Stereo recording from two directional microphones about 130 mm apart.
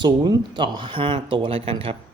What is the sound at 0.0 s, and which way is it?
Speech, 35° right (ahead or behind).